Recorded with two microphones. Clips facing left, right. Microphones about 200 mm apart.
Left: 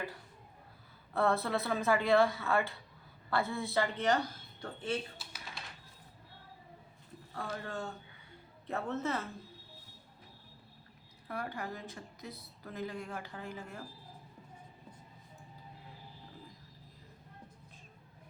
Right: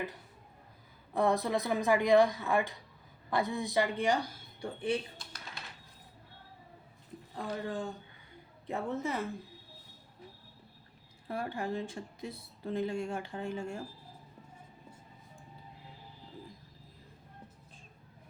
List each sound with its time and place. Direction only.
1.1 s speech: 15° right (ahead or behind)
5.1 s typing: 5° left (ahead or behind)
7.3 s speech: 15° right (ahead or behind)
11.3 s a woman's voice: 25° right (ahead or behind)